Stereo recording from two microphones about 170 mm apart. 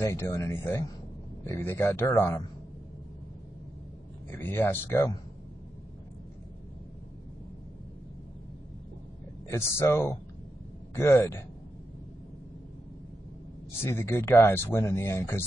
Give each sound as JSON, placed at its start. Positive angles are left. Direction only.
{"t": 0.0, "sound": "speech", "side_deg": 15}
{"t": 4.3, "sound": "speech", "side_deg": 10}
{"t": 9.5, "sound": "speech", "side_deg": 15}
{"t": 13.8, "sound": "speech", "side_deg": 15}